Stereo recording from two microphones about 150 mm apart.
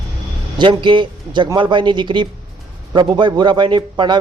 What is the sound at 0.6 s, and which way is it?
A man's voice, 30° right (ahead or behind).